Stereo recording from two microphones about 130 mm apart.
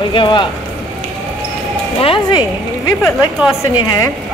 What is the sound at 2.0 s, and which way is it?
Speech, 45° left (ahead or behind).